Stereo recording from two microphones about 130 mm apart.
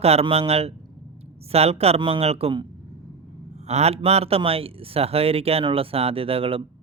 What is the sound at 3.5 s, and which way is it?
Speech, 55° right (ahead or behind).